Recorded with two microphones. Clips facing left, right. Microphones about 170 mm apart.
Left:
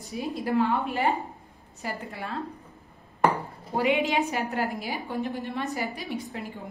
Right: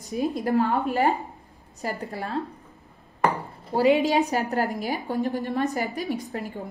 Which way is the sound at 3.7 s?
35° right (ahead or behind).